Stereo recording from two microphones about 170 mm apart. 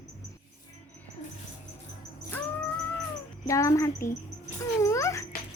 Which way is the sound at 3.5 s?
20° left (ahead or behind).